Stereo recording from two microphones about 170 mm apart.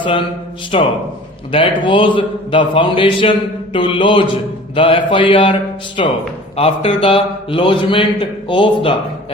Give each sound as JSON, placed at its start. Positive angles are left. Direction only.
{"t": 0.0, "sound": "a man's voice", "side_deg": 30}